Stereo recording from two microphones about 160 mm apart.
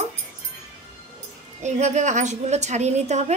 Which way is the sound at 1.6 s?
45° right (ahead or behind).